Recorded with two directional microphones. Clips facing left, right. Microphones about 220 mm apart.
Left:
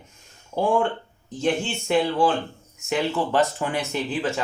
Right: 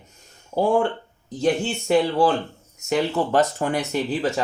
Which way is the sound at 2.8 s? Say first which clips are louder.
Right 2 dB; 40° right (ahead or behind).